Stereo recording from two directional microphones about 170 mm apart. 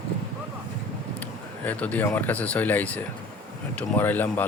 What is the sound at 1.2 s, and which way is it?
Speech, 10° left (ahead or behind).